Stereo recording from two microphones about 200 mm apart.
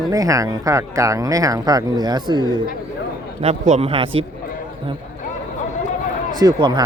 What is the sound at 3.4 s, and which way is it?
Speech, 30° right (ahead or behind).